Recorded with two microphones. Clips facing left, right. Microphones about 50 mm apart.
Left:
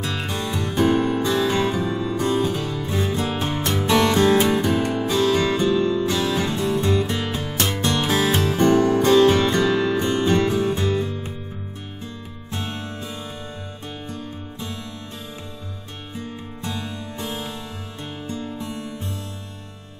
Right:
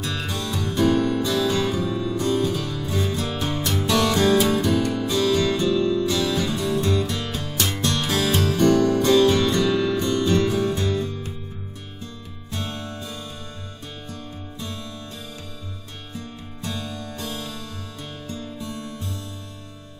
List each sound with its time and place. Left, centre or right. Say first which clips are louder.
0.0 s music: left 2 dB; left
12.4 s music: left 1 dB; left
16.2 s music: left 3 dB; left